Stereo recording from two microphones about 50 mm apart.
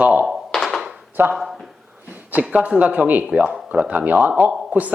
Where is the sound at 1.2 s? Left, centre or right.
Right.